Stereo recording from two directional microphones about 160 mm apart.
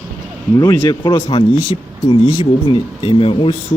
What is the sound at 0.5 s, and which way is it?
Speech, 20° left (ahead or behind).